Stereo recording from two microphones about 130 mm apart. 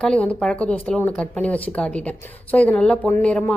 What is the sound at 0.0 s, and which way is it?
Speech, 10° left (ahead or behind).